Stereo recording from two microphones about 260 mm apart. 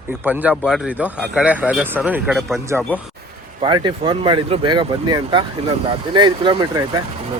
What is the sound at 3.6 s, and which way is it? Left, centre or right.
Speech, centre.